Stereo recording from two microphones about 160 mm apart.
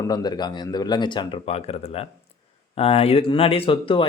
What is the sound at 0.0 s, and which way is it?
Speech, 25° left (ahead or behind).